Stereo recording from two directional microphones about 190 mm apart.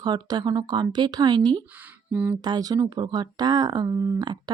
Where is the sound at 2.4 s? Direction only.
20° right (ahead or behind).